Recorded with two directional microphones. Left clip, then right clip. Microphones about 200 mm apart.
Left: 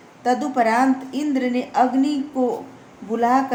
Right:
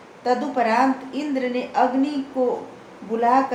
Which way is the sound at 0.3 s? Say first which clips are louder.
Left 2 dB; 45° left (ahead or behind).